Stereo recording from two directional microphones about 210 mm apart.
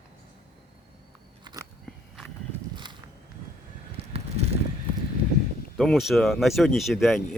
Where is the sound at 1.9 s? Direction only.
Centre (ahead or behind).